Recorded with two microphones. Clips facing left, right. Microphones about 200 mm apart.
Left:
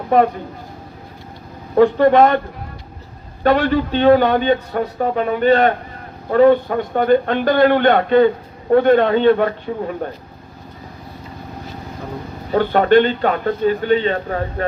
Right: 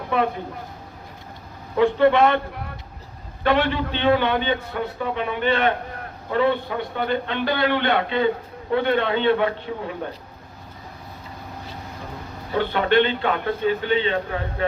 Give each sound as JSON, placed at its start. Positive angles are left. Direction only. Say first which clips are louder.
{"t": 0.1, "sound": "a man's voice", "louder": "left 8 dB", "side_deg": 45}
{"t": 1.7, "sound": "a man's voice", "louder": "left 5 dB", "side_deg": 45}
{"t": 3.4, "sound": "a man's voice", "louder": "left 5 dB", "side_deg": 40}
{"t": 12.5, "sound": "a man's voice", "louder": "left 6 dB", "side_deg": 45}